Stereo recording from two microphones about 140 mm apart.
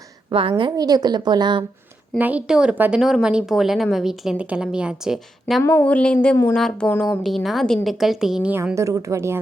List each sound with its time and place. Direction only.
0.3 s a woman's voice: 40° right (ahead or behind)
2.1 s a woman's voice: 10° right (ahead or behind)
8.7 s a woman's voice: 20° right (ahead or behind)